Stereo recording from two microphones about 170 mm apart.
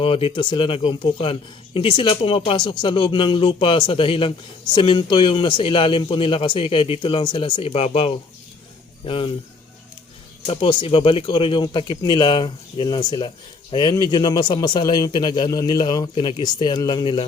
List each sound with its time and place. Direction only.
0.0 s a man's voice: 30° left (ahead or behind)
10.4 s a man's voice: 30° left (ahead or behind)